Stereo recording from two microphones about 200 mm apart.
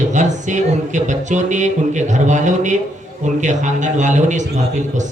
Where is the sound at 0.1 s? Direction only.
35° right (ahead or behind).